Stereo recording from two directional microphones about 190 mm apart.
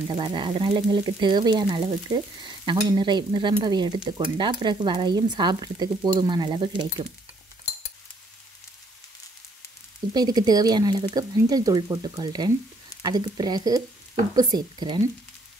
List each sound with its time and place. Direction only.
0.1 s speech: 25° right (ahead or behind)
10.1 s speech: 20° right (ahead or behind)